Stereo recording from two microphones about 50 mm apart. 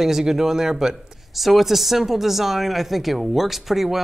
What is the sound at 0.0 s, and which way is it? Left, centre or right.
Speech, centre.